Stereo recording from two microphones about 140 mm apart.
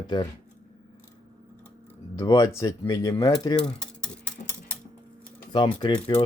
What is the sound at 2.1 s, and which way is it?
Speech, 25° left (ahead or behind).